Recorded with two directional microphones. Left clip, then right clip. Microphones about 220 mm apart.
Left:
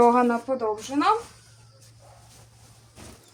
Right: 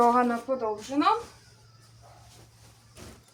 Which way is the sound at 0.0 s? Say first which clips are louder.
Left 3 dB; 40° left (ahead or behind).